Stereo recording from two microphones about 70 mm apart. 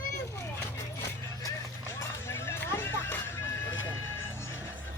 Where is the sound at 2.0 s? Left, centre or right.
Left.